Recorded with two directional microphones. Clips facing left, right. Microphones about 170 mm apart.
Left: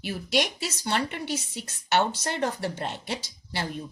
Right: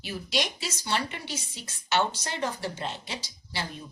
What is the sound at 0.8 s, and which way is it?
Speech, 50° left (ahead or behind).